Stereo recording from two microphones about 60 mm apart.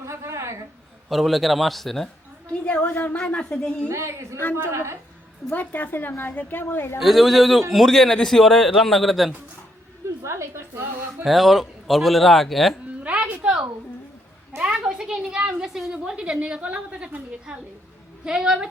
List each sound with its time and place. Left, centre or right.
0.0 s a sound: right
1.1 s a man's voice: centre
2.5 s a sound: left
3.2 s speech: centre
3.8 s a woman's voice: right
5.5 s a woman's voice: left
7.0 s a man's voice: centre
10.2 s a woman's voice: right
11.3 s a man's voice: centre
13.0 s a sound: right
14.7 s a woman's voice: centre